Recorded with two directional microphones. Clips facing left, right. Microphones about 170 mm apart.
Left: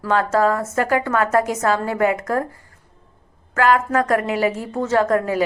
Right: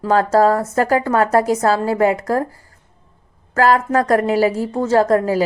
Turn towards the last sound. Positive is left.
turn(degrees=-35)  # may be behind; listen again after turning